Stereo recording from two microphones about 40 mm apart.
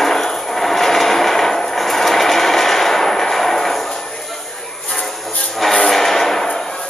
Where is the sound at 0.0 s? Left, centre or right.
Centre.